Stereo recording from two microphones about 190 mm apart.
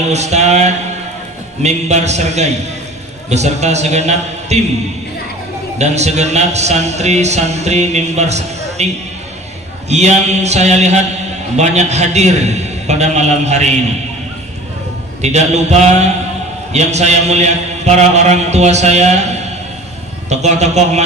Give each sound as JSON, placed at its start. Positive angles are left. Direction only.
{"t": 0.1, "sound": "a man's voice", "side_deg": -35}
{"t": 5.8, "sound": "a man's voice", "side_deg": -35}
{"t": 9.8, "sound": "a man's voice", "side_deg": -35}
{"t": 15.2, "sound": "a man's voice", "side_deg": -35}